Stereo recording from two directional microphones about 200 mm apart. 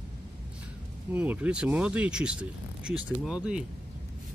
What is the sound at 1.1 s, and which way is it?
Speech, 10° right (ahead or behind).